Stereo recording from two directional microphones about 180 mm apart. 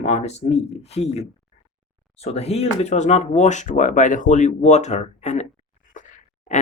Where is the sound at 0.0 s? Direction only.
35° left (ahead or behind).